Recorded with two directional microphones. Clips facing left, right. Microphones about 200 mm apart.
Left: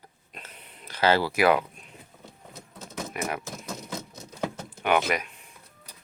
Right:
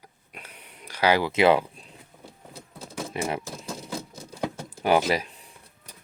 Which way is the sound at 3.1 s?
25° right (ahead or behind).